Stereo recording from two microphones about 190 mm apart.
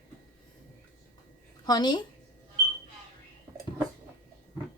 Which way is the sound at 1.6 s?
20° left (ahead or behind).